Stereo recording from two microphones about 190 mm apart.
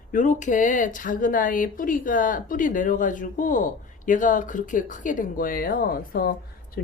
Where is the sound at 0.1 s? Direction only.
40° left (ahead or behind).